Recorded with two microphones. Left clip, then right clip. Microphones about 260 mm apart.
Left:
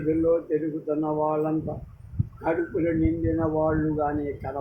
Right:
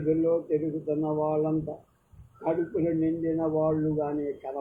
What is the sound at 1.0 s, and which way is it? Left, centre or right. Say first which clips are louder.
Speech: left 2 dB; left.